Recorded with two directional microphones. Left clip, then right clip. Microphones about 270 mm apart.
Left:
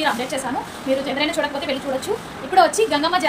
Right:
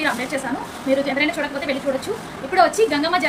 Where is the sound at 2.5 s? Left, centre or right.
Centre.